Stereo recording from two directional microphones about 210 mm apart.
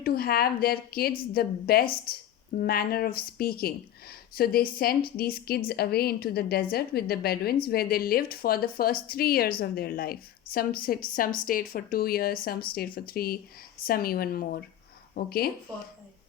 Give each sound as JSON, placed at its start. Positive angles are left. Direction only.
{"t": 0.0, "sound": "a woman's voice", "side_deg": 45}